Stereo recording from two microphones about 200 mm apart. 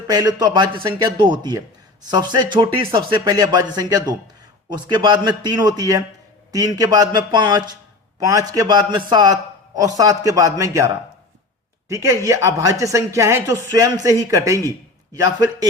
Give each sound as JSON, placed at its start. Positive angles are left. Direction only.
{"t": 0.1, "sound": "a man's voice", "side_deg": -20}